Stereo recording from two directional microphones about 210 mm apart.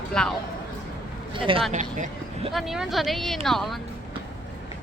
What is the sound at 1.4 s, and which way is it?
Speech, 25° right (ahead or behind).